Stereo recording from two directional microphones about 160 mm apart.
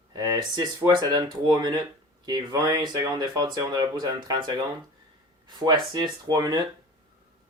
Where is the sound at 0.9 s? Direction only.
25° right (ahead or behind).